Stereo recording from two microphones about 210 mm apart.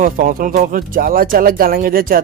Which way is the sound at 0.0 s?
40° right (ahead or behind).